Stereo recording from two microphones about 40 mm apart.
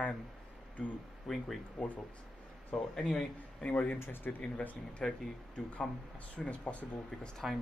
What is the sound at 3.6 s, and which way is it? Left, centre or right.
Speech, left.